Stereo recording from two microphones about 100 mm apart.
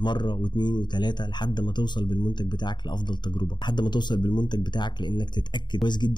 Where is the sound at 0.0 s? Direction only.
50° left (ahead or behind).